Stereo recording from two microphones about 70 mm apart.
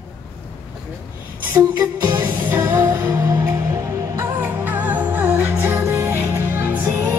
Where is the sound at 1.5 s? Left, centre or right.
Right.